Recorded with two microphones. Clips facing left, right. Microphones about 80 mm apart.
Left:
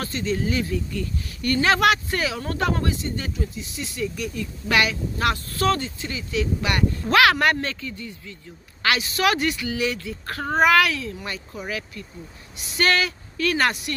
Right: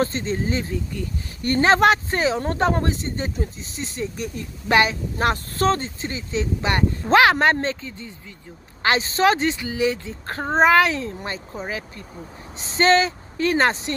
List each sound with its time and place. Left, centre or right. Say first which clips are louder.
0.0 s a woman's voice: right 2 dB; right